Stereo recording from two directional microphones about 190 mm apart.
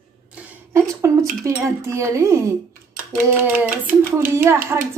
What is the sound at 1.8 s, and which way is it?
A woman's voice, 15° right (ahead or behind).